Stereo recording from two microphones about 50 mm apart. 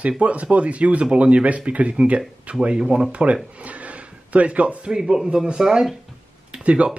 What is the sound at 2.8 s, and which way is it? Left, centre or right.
Speech, centre.